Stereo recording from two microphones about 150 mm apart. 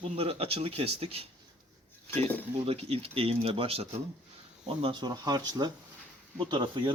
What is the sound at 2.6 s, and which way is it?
Speech, 40° right (ahead or behind).